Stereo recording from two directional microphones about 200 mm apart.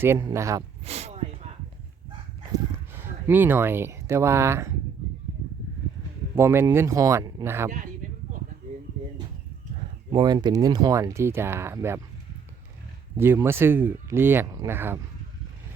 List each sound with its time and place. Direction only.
0.0 s speech: 15° right (ahead or behind)
0.9 s a sound: 30° right (ahead or behind)
2.9 s speech: 10° right (ahead or behind)
6.3 s speech: 10° right (ahead or behind)
10.1 s speech: 20° right (ahead or behind)
13.1 s speech: 10° right (ahead or behind)